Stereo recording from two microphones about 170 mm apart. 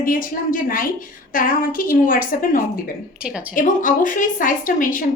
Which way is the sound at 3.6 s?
50° left (ahead or behind).